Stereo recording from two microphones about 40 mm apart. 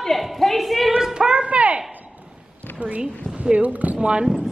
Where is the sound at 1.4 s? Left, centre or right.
Right.